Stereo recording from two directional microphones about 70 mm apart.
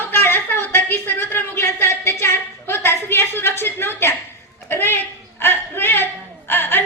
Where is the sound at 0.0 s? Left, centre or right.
Left.